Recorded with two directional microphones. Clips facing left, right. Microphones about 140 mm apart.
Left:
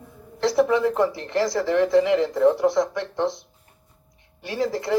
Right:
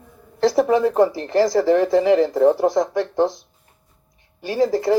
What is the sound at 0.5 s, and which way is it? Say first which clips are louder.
Speech: right 3 dB; 40° right (ahead or behind).